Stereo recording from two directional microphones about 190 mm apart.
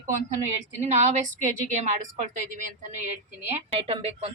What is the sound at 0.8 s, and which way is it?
Speech, 35° right (ahead or behind).